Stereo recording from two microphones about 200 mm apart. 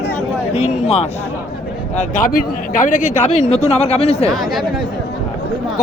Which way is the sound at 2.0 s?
45° left (ahead or behind).